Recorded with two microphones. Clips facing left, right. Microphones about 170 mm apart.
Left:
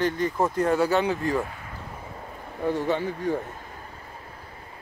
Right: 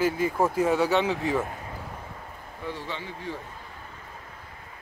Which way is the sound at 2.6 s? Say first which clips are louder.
Left 10 dB; 50° left (ahead or behind).